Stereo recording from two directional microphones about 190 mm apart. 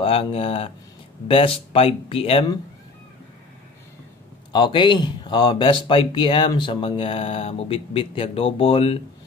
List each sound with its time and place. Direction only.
0.0 s speech: 30° left (ahead or behind)
4.5 s speech: 25° left (ahead or behind)